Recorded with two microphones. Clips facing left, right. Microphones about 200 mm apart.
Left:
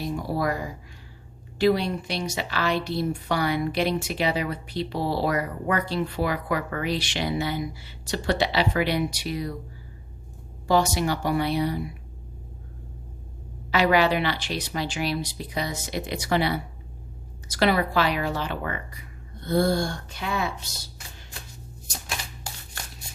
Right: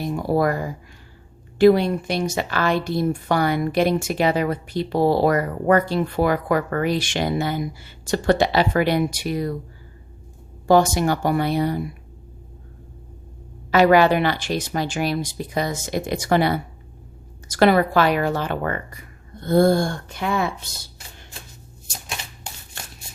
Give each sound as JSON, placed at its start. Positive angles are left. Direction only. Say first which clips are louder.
{"t": 0.0, "sound": "speech", "louder": "right 6 dB", "side_deg": -50}
{"t": 10.7, "sound": "speech", "louder": "right 6 dB", "side_deg": -50}
{"t": 13.7, "sound": "speech", "louder": "right 6 dB", "side_deg": -50}